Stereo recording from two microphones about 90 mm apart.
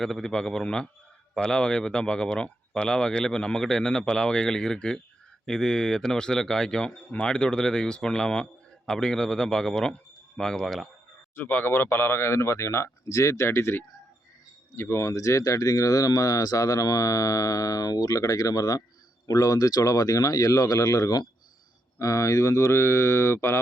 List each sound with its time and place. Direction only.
0.0 s speech: 5° left (ahead or behind)
11.3 s speech: 20° left (ahead or behind)